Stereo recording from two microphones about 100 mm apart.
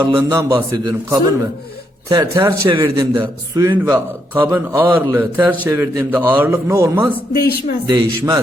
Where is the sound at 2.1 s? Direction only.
30° right (ahead or behind).